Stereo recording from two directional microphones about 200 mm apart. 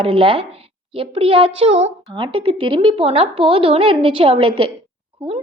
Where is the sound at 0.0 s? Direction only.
25° right (ahead or behind).